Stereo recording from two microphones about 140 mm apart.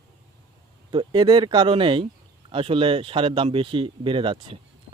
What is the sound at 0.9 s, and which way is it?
Speech, 35° right (ahead or behind).